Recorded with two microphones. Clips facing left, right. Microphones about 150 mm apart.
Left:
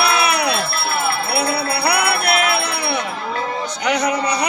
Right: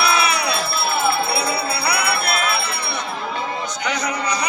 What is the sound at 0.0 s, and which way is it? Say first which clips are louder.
Music: left 2 dB; 60° left (ahead or behind).